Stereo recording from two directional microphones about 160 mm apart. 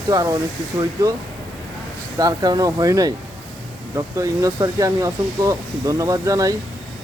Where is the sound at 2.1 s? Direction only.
25° right (ahead or behind).